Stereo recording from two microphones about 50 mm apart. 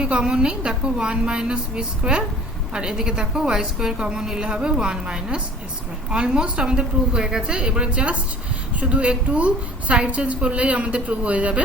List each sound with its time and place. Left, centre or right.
0.0 s a woman's voice: centre